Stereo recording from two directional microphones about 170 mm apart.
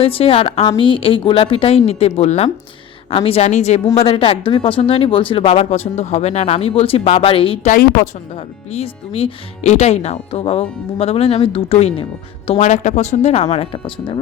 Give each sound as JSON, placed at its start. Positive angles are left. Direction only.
{"t": 0.0, "sound": "speech", "side_deg": 35}
{"t": 7.7, "sound": "a woman's voice", "side_deg": 60}
{"t": 8.4, "sound": "speech", "side_deg": 35}